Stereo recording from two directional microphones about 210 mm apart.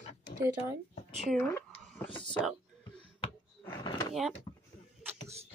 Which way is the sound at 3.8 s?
20° left (ahead or behind).